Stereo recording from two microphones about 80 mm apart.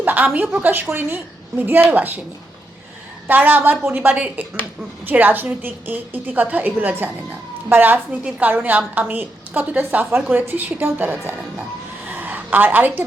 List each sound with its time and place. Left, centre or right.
0.0 s a woman's voice: right
3.2 s a woman's voice: right
12.1 s a sound: right